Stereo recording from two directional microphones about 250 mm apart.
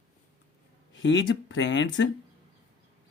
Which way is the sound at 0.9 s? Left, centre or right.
Left.